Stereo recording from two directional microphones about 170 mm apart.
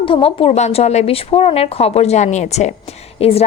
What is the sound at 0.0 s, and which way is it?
A woman's voice, 35° left (ahead or behind).